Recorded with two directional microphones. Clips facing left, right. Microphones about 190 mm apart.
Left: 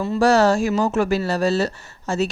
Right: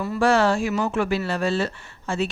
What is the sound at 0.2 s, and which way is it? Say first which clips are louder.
Speech: left 3 dB; 40° left (ahead or behind).